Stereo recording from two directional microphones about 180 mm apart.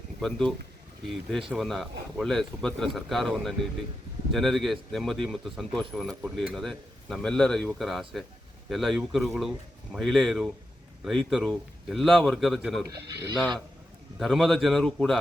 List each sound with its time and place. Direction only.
0.2 s speech: 5° left (ahead or behind)
12.8 s speech: 20° right (ahead or behind)
14.2 s speech: centre (ahead or behind)